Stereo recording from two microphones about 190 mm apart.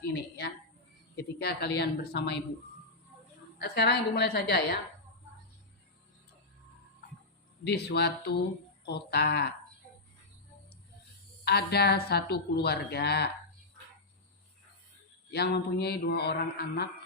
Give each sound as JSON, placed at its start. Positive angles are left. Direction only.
{"t": 0.0, "sound": "a woman's voice", "side_deg": 55}
{"t": 3.6, "sound": "a woman's voice", "side_deg": 60}
{"t": 7.9, "sound": "a woman's voice", "side_deg": 60}
{"t": 11.4, "sound": "a woman's voice", "side_deg": 60}
{"t": 15.3, "sound": "a woman's voice", "side_deg": 60}